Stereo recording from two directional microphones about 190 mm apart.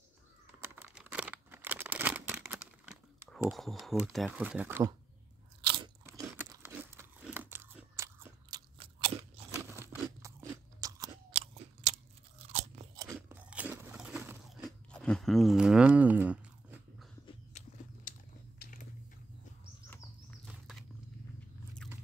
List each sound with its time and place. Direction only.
0.6 s computer keyboard: 10° right (ahead or behind)
6.0 s crunch: 15° right (ahead or behind)
9.5 s crunch: 15° right (ahead or behind)
11.3 s crunch: 35° right (ahead or behind)
12.9 s crunch: 15° right (ahead or behind)
18.6 s biting: 45° left (ahead or behind)